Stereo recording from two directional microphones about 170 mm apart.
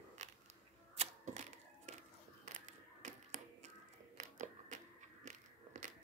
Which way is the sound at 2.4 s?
45° right (ahead or behind).